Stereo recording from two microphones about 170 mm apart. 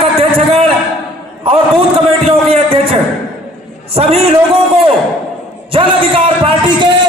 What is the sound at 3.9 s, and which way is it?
Speech, 35° right (ahead or behind).